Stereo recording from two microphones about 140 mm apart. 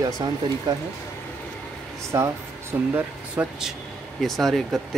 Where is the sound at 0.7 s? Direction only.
30° right (ahead or behind).